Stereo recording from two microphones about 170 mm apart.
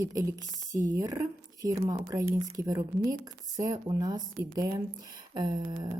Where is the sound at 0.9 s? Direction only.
20° right (ahead or behind).